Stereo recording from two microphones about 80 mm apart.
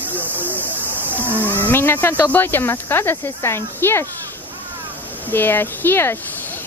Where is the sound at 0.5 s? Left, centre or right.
Right.